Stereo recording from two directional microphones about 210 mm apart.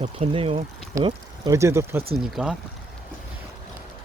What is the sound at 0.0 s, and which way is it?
Speech, 30° right (ahead or behind).